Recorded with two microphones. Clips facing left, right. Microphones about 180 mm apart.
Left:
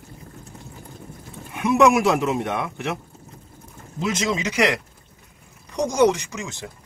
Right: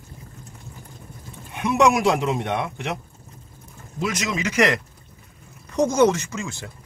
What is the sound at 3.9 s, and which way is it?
Speech, 25° left (ahead or behind).